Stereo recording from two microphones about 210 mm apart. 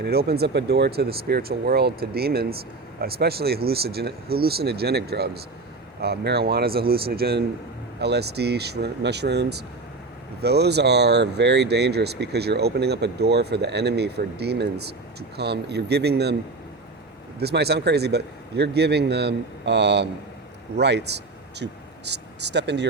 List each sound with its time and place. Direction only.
0.0 s speech: 50° right (ahead or behind)
17.4 s speech: 50° right (ahead or behind)